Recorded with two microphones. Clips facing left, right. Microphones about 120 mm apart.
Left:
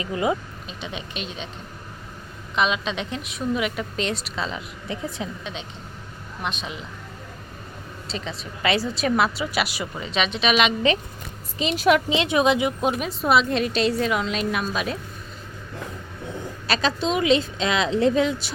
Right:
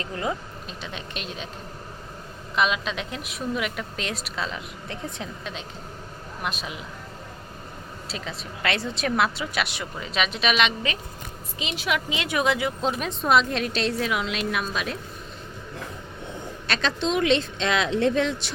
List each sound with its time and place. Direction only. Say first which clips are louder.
0.0 s speech: left 5 dB; 10° left (ahead or behind)
0.8 s a woman's voice: left 4 dB; centre (ahead or behind)
2.6 s a woman's voice: left 1 dB; centre (ahead or behind)
8.0 s a woman's voice: left 3 dB; 5° right (ahead or behind)
11.6 s a woman's voice: left 8 dB; 45° left (ahead or behind)
12.0 s speech: left 5 dB; 25° left (ahead or behind)
12.9 s a woman's voice: right 1 dB; 5° left (ahead or behind)
16.6 s a woman's voice: left 2 dB; 5° left (ahead or behind)